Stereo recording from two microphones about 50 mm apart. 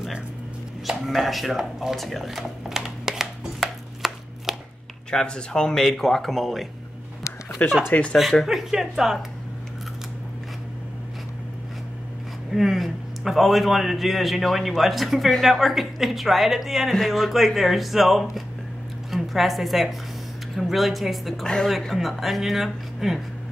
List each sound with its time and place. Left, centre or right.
0.8 s speech: centre
3.5 s chopping: centre
5.1 s a man's voice: centre
7.6 s speech: left
8.5 s speech: centre
12.5 s a man's voice: centre